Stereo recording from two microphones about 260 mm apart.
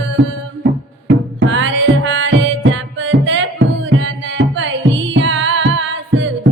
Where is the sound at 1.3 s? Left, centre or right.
Right.